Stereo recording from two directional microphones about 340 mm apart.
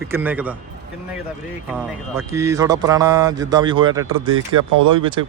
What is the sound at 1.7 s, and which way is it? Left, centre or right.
Speech, centre.